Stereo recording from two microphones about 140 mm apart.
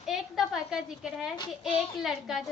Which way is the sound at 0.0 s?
Centre (ahead or behind).